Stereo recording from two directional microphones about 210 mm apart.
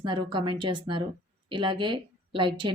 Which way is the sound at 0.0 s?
25° right (ahead or behind).